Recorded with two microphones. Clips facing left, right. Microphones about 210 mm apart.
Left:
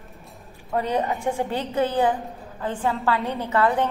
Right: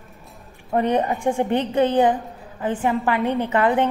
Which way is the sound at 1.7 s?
20° right (ahead or behind).